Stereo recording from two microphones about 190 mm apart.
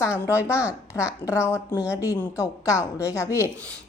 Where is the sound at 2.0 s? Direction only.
15° left (ahead or behind).